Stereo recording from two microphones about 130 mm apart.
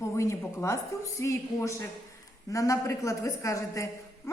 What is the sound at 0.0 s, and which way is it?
A woman's voice, 20° left (ahead or behind).